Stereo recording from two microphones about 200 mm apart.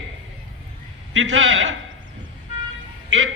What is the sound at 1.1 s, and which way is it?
Speech, 70° right (ahead or behind).